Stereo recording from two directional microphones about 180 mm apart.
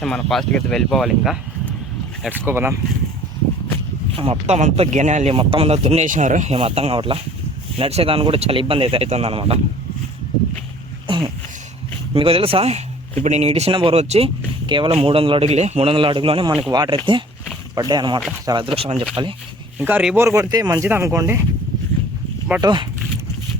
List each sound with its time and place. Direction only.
0.0 s speech: centre (ahead or behind)
2.5 s speech: 15° right (ahead or behind)
4.1 s speech: 35° right (ahead or behind)
11.0 s a sound: 25° right (ahead or behind)
12.1 s speech: 30° right (ahead or behind)
19.8 s speech: 5° right (ahead or behind)
22.6 s speech: 25° right (ahead or behind)